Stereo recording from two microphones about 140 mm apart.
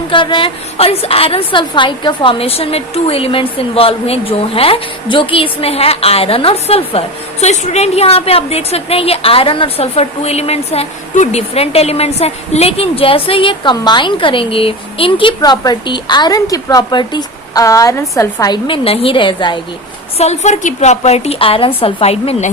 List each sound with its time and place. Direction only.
0.1 s a woman's voice: 35° left (ahead or behind)
20.1 s a woman's voice: 50° left (ahead or behind)